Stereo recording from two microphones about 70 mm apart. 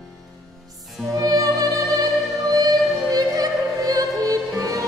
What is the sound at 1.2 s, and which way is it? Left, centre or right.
Music, right.